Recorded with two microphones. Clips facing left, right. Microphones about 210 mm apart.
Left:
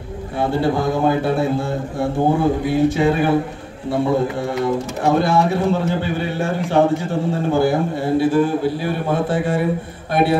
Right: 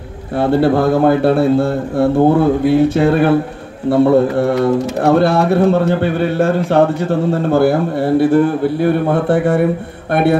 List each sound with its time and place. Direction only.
0.4 s speech: 60° right (ahead or behind)